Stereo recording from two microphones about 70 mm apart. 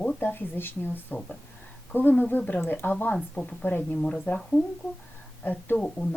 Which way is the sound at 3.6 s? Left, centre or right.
Left.